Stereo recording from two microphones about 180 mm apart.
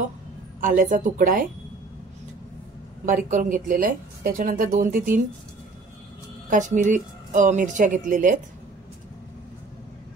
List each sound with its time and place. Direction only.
0.6 s speech: 45° right (ahead or behind)
3.1 s speech: 45° right (ahead or behind)
6.5 s speech: 45° right (ahead or behind)